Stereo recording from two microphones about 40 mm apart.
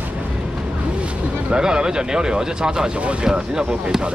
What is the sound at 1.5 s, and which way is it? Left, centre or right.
Speech, centre.